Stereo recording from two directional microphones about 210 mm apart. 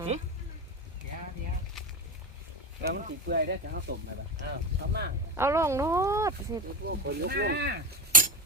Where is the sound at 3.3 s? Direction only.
50° right (ahead or behind).